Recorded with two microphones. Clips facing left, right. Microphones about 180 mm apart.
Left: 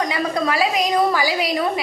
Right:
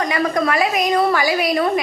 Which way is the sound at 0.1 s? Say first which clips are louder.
Right 3 dB; 10° left (ahead or behind).